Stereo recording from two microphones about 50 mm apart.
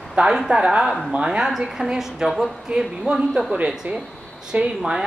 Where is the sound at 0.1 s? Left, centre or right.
Centre.